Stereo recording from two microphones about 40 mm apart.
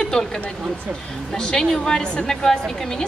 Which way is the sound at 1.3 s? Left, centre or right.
Centre.